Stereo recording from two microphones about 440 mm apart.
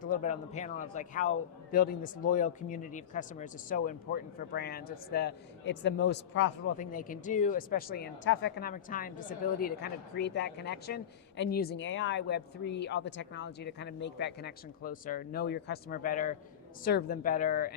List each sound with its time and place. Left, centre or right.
0.0 s speech: centre